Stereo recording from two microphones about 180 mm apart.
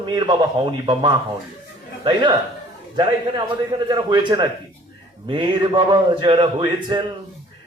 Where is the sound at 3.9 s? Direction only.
25° right (ahead or behind).